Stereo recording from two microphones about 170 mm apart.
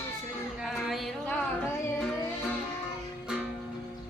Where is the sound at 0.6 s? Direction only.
Centre (ahead or behind).